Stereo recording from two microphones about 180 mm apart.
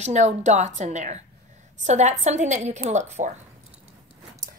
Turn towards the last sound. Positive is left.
turn(degrees=-40)  # may be behind; listen again after turning